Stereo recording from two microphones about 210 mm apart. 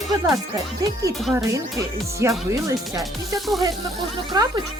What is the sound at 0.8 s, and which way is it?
Speech, 15° right (ahead or behind).